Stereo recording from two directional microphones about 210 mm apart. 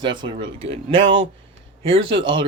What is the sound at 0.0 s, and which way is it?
Speech, 20° right (ahead or behind).